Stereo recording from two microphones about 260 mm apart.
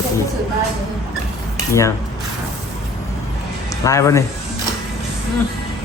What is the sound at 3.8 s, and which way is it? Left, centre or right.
Speech, centre.